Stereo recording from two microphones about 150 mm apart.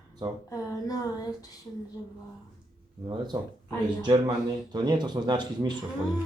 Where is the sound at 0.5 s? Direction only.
25° left (ahead or behind).